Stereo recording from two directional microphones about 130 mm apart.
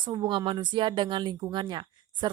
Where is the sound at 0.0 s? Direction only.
35° right (ahead or behind).